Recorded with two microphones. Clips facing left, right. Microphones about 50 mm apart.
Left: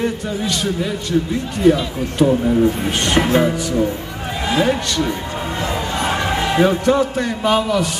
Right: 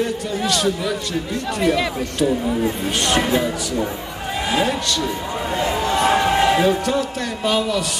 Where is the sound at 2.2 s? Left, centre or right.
Left.